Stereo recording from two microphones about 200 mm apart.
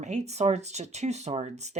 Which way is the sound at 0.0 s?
35° right (ahead or behind).